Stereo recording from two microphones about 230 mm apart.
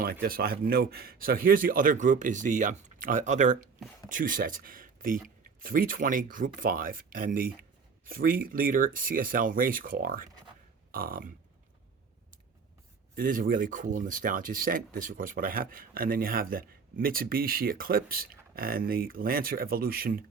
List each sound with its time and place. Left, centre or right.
0.0 s speech: right
13.1 s speech: right